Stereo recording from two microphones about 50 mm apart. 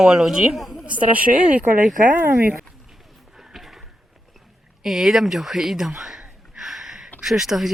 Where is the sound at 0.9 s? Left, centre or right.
Right.